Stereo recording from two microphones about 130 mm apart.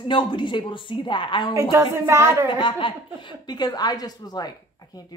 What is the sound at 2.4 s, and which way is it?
A woman's voice, 40° left (ahead or behind).